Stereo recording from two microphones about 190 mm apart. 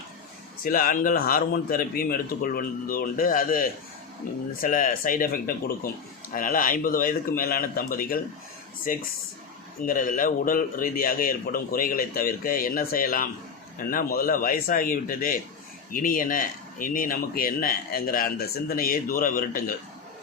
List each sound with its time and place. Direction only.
0.6 s speech: 50° left (ahead or behind)